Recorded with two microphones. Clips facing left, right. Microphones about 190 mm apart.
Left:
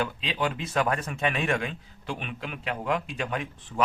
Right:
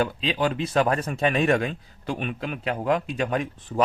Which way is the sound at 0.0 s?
35° right (ahead or behind).